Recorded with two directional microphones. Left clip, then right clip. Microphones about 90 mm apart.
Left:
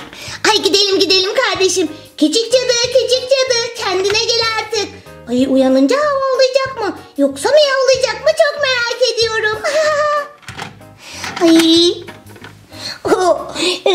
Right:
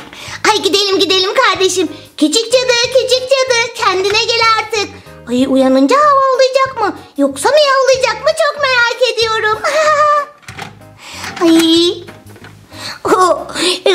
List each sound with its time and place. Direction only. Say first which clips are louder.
0.2 s a child's voice: right 1 dB; 5° left (ahead or behind)
11.1 s music: even; 5° left (ahead or behind)
12.8 s a sound: right 3 dB; 5° right (ahead or behind)
13.6 s a woman's voice: right 2 dB; 15° right (ahead or behind)